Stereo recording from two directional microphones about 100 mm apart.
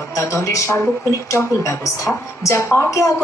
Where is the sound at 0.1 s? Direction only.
30° left (ahead or behind).